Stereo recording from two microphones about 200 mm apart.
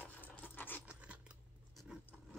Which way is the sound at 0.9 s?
5° right (ahead or behind).